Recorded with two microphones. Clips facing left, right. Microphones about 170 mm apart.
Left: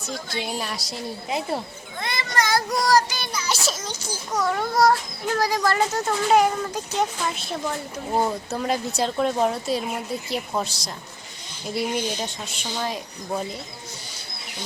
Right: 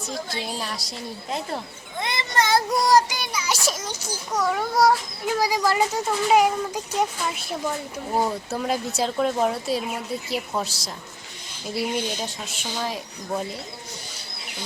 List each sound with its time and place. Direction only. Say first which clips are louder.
0.1 s a child's voice: left 1 dB; 30° right (ahead or behind)
0.6 s speech: left 1 dB; centre (ahead or behind)
2.0 s a child's voice: right 1 dB; 20° right (ahead or behind)
2.7 s child singing: right 1 dB; 20° right (ahead or behind)
4.4 s a child's voice: even; 5° right (ahead or behind)